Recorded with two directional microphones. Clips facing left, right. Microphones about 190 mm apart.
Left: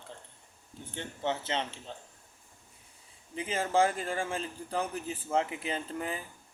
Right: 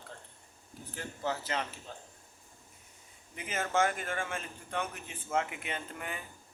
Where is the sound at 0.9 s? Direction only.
25° left (ahead or behind).